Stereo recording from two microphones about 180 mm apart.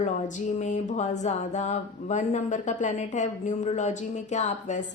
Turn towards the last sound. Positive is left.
turn(degrees=40)  # may be behind; listen again after turning